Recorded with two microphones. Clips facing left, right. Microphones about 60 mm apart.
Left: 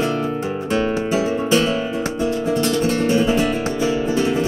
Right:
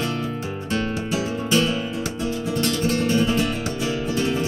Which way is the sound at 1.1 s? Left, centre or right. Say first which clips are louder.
Left 3 dB; left.